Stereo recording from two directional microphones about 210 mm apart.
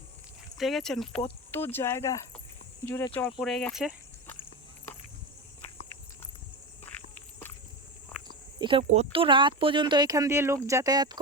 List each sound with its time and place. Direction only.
0.5 s speech: centre (ahead or behind)
8.8 s speech: 30° right (ahead or behind)